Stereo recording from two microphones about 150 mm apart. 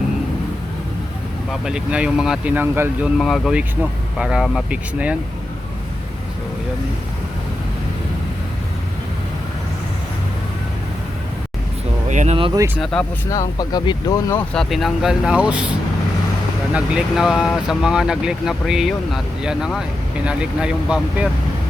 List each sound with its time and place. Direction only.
1.6 s speech: 5° right (ahead or behind)
3.2 s speech: centre (ahead or behind)
12.0 s speech: 50° right (ahead or behind)
12.5 s speech: 15° right (ahead or behind)
12.8 s speech: 5° left (ahead or behind)
13.3 s speech: 25° left (ahead or behind)
14.5 s speech: centre (ahead or behind)
16.7 s speech: 5° right (ahead or behind)